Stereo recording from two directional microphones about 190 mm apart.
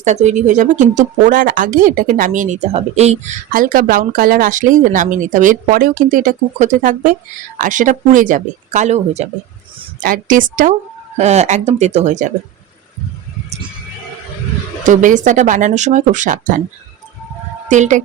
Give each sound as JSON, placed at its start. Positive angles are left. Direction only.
{"t": 0.0, "sound": "speech", "side_deg": -35}
{"t": 10.0, "sound": "speech", "side_deg": -45}
{"t": 14.8, "sound": "speech", "side_deg": -40}
{"t": 17.7, "sound": "speech", "side_deg": -40}